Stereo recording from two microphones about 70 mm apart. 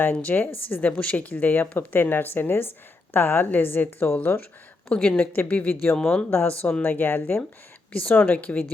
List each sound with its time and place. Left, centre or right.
0.0 s speech: left
4.9 s a woman's voice: centre
6.0 s a woman's voice: centre
6.8 s speech: left